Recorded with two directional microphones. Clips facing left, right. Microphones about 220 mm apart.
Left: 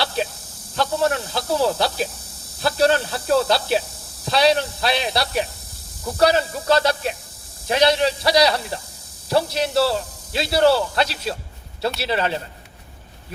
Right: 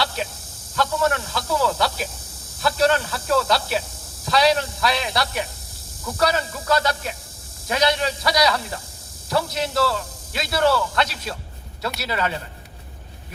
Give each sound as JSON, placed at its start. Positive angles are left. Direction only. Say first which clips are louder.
{"t": 0.8, "sound": "a man's voice", "louder": "left 1 dB", "side_deg": 30}